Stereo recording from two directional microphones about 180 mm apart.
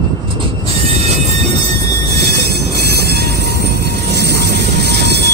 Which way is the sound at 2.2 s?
60° right (ahead or behind).